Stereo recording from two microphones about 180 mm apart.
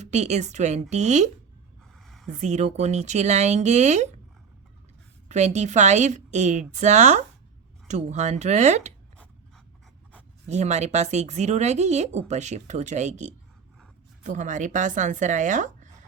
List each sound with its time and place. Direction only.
0.0 s speech: 40° right (ahead or behind)
2.0 s a sound: centre (ahead or behind)
2.4 s speech: 40° right (ahead or behind)
5.3 s speech: 40° right (ahead or behind)
10.5 s speech: 40° right (ahead or behind)